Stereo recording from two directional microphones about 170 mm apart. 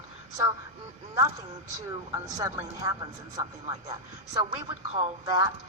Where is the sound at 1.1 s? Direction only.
20° right (ahead or behind).